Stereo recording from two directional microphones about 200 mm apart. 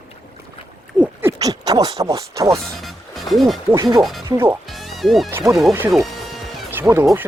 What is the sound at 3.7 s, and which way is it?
Speech, 15° right (ahead or behind).